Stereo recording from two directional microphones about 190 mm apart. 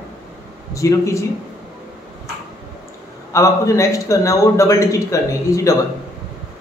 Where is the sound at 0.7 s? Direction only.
15° left (ahead or behind).